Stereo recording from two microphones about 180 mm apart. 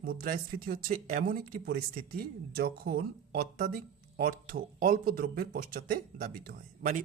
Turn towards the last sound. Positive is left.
turn(degrees=-50)  # may be behind; listen again after turning